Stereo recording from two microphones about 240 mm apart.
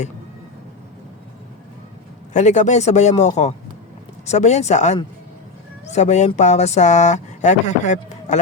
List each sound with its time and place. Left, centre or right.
2.3 s speech: left